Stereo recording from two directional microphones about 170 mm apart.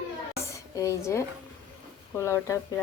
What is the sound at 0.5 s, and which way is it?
A woman's voice, 20° left (ahead or behind).